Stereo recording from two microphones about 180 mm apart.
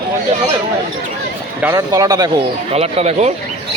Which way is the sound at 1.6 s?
15° right (ahead or behind).